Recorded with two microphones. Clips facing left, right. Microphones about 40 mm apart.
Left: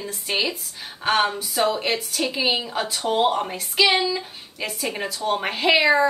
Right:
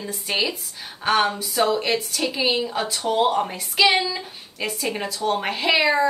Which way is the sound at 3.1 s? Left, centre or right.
Centre.